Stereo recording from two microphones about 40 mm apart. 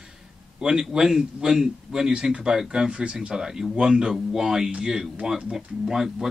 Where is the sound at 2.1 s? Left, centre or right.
Right.